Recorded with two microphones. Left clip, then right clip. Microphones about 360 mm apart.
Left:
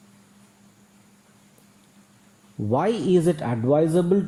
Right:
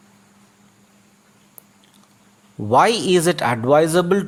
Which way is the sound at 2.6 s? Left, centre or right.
Right.